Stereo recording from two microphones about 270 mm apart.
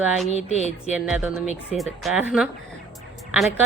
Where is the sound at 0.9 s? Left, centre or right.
Centre.